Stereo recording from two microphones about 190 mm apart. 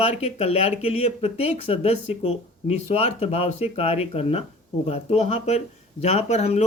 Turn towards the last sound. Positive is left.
turn(degrees=35)  # may be behind; listen again after turning